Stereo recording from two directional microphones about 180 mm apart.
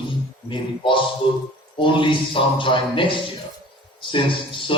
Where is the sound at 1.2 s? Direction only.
30° left (ahead or behind).